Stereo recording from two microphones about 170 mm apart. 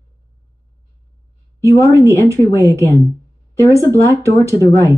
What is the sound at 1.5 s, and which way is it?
A woman's voice, 15° right (ahead or behind).